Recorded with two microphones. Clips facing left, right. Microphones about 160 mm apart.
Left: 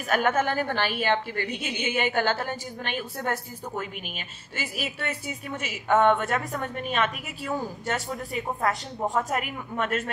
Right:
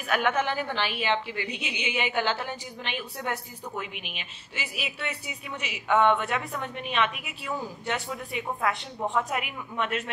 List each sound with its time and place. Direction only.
0.1 s a woman's voice: 45° left (ahead or behind)